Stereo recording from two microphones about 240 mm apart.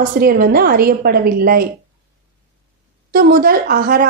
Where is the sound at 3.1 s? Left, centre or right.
Right.